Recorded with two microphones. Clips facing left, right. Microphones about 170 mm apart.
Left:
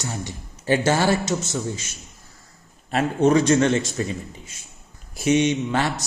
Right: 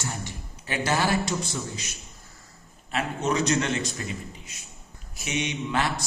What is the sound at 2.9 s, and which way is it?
Speech, 45° left (ahead or behind).